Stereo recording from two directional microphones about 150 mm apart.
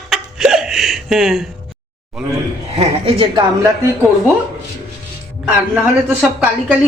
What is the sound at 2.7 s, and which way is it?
Speech, 35° right (ahead or behind).